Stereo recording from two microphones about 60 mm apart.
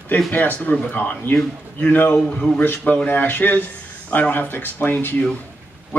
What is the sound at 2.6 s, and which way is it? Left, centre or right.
A man's voice, left.